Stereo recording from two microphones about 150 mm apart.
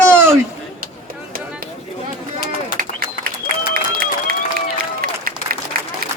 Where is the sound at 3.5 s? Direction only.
70° right (ahead or behind).